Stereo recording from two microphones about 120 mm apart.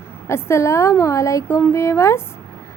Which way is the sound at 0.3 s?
20° left (ahead or behind).